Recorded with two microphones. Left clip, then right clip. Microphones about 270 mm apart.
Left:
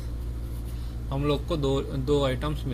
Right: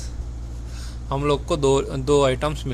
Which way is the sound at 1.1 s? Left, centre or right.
Right.